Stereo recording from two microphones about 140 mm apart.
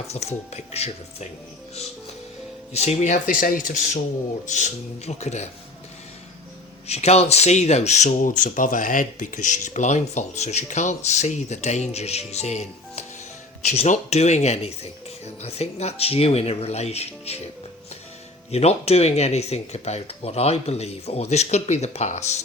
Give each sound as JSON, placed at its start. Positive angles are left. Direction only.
{"t": 0.1, "sound": "speech", "side_deg": 50}
{"t": 2.7, "sound": "speech", "side_deg": 50}
{"t": 4.4, "sound": "speech", "side_deg": 60}
{"t": 6.8, "sound": "speech", "side_deg": 50}
{"t": 18.5, "sound": "speech", "side_deg": 50}